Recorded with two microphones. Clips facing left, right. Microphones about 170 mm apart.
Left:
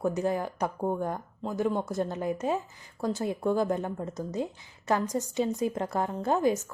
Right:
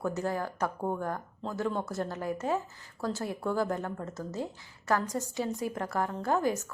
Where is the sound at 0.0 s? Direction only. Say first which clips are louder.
Left 4 dB; 20° left (ahead or behind).